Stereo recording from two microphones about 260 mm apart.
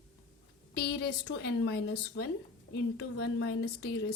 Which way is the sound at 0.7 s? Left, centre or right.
Left.